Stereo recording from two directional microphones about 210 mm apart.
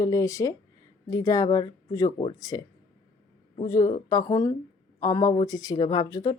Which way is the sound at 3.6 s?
15° left (ahead or behind).